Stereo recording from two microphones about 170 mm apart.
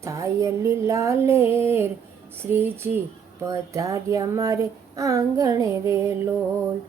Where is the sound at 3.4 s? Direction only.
20° right (ahead or behind).